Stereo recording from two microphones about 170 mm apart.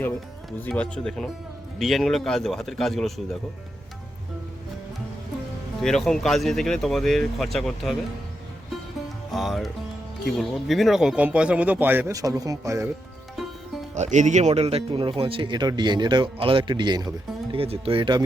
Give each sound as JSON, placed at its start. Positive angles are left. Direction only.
{"t": 0.6, "sound": "speech", "side_deg": 5}
{"t": 5.8, "sound": "speech", "side_deg": 5}
{"t": 9.3, "sound": "speech", "side_deg": 0}
{"t": 13.9, "sound": "speech", "side_deg": -45}